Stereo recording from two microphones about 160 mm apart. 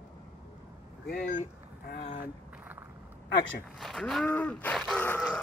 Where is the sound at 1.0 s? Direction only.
70° left (ahead or behind).